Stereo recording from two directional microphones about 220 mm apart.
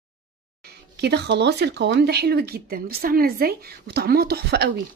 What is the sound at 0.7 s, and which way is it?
Speech, 50° right (ahead or behind).